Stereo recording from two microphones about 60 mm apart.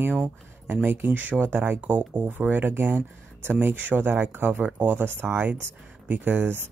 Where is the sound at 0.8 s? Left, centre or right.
Right.